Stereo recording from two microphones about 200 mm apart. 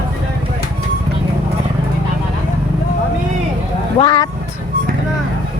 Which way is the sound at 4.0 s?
20° left (ahead or behind).